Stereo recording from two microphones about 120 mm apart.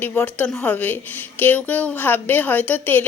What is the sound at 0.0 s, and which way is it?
A woman's voice, 15° left (ahead or behind).